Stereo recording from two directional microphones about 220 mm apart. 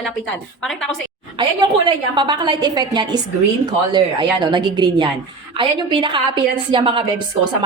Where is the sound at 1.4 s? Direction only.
20° right (ahead or behind).